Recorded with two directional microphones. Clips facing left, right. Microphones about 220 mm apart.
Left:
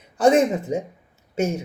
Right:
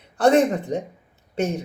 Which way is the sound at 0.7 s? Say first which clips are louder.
Left 1 dB; 5° left (ahead or behind).